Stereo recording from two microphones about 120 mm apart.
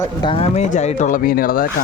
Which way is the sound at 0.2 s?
45° left (ahead or behind).